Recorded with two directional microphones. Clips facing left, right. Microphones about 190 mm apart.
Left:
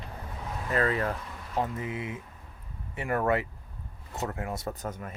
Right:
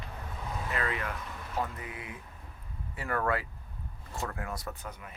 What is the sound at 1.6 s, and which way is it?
Speech, 25° left (ahead or behind).